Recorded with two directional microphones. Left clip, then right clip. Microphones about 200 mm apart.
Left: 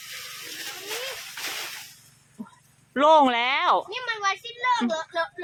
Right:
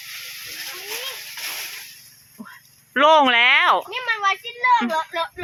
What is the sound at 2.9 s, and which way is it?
Speech, 5° left (ahead or behind).